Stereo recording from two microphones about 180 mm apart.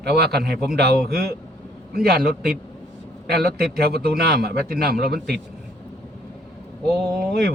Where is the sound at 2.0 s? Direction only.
55° right (ahead or behind).